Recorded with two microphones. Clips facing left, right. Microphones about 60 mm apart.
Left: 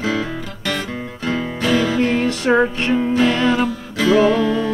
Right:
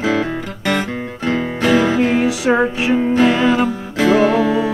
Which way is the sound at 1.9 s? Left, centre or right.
Centre.